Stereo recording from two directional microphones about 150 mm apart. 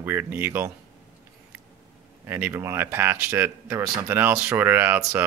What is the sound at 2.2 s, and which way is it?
Speech, 15° right (ahead or behind).